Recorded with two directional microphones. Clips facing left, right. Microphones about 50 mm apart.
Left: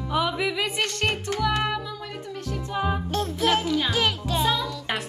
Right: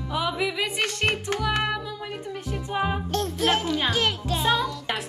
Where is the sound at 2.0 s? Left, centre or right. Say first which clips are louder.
Right 1 dB; centre.